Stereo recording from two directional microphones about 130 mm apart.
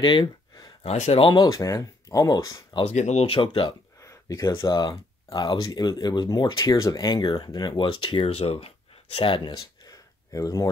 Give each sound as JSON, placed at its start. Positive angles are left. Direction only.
{"t": 0.0, "sound": "a sound", "side_deg": 35}
{"t": 0.8, "sound": "speech", "side_deg": 55}
{"t": 1.2, "sound": "speech", "side_deg": 35}
{"t": 2.8, "sound": "speech", "side_deg": 60}
{"t": 4.0, "sound": "speech", "side_deg": 25}